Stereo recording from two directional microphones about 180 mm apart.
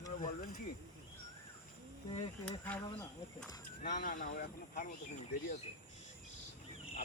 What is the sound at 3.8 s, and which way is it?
Speech, 50° left (ahead or behind).